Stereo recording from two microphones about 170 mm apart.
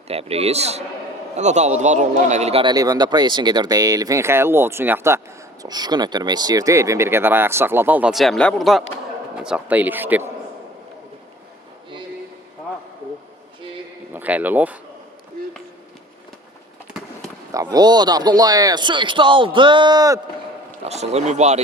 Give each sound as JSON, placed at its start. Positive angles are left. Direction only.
{"t": 0.1, "sound": "a man's voice", "side_deg": -35}
{"t": 2.7, "sound": "a man's voice", "side_deg": -20}
{"t": 14.1, "sound": "speech", "side_deg": -10}
{"t": 17.5, "sound": "a man's voice", "side_deg": -20}
{"t": 20.8, "sound": "speech", "side_deg": -40}